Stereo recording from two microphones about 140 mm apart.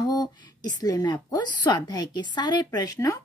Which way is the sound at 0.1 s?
30° left (ahead or behind).